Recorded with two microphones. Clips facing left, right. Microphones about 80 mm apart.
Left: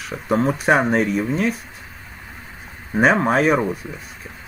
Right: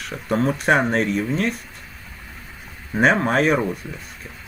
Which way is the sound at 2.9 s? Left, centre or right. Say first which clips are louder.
Left 1 dB; centre.